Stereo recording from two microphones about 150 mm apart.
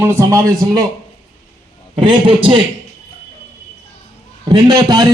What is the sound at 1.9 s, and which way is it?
Speech, 35° right (ahead or behind).